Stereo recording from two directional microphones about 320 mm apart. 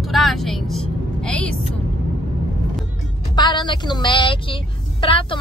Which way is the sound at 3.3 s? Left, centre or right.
Centre.